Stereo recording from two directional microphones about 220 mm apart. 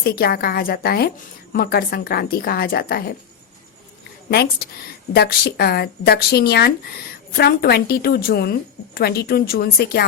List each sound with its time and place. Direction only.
0.0 s speech: 45° left (ahead or behind)
4.3 s speech: 45° left (ahead or behind)